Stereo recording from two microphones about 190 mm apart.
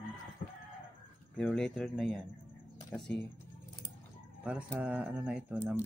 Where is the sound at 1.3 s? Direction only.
5° left (ahead or behind).